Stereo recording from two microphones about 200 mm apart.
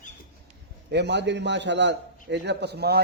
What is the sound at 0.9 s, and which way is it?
A man's voice, 60° right (ahead or behind).